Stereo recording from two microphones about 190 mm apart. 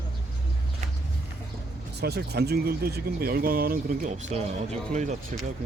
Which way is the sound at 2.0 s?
60° right (ahead or behind).